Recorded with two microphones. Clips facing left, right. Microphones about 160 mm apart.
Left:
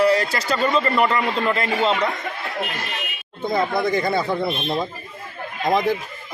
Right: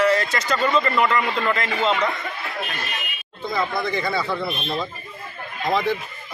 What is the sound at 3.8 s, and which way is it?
Speech, 45° left (ahead or behind).